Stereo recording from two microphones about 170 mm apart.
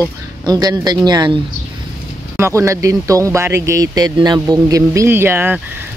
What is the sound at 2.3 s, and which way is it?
Speech, 15° right (ahead or behind).